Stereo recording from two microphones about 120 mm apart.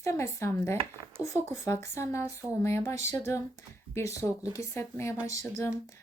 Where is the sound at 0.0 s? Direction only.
25° left (ahead or behind).